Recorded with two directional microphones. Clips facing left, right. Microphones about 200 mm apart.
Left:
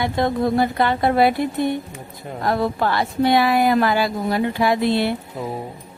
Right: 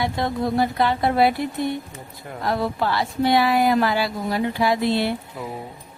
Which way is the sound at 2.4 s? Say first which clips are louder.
Left 3 dB; 50° left (ahead or behind).